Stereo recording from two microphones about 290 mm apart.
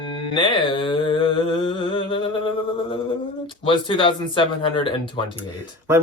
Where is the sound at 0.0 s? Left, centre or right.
Centre.